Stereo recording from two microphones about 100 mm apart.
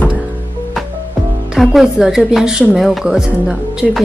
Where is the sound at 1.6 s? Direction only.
Centre (ahead or behind).